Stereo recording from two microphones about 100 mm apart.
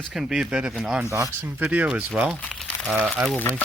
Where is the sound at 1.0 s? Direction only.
30° right (ahead or behind).